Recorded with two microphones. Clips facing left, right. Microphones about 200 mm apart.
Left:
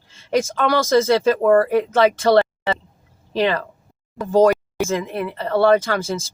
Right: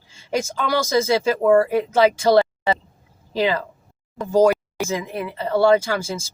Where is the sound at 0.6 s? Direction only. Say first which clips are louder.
Left 2 dB; 55° left (ahead or behind).